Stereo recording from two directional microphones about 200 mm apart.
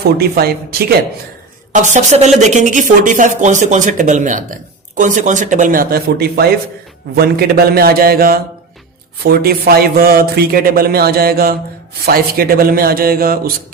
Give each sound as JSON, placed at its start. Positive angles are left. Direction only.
{"t": 0.3, "sound": "speech", "side_deg": -50}
{"t": 1.7, "sound": "speech", "side_deg": -35}